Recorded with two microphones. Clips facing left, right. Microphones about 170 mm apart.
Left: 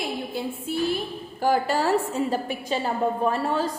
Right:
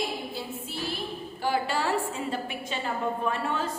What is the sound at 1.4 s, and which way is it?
A woman's voice, 45° left (ahead or behind).